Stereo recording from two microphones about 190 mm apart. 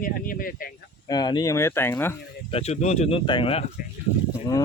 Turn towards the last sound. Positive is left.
turn(degrees=15)  # may be behind; listen again after turning